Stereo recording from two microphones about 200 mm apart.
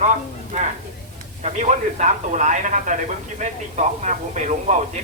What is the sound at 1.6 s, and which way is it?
Speech, 35° right (ahead or behind).